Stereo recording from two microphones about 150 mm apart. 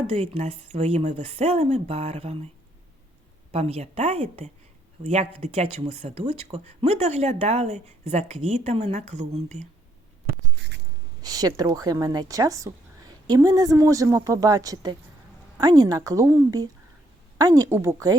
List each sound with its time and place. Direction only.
0.1 s speech: 45° right (ahead or behind)
3.5 s speech: 45° right (ahead or behind)
11.2 s speech: 25° right (ahead or behind)